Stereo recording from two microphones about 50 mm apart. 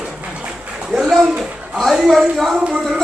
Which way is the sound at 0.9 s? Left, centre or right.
Centre.